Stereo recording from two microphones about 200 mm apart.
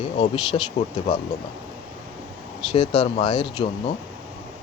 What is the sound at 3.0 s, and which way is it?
Speech, 35° left (ahead or behind).